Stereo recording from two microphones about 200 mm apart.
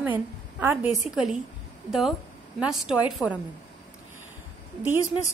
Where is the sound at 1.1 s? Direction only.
5° right (ahead or behind).